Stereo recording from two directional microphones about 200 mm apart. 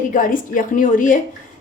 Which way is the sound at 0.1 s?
40° left (ahead or behind).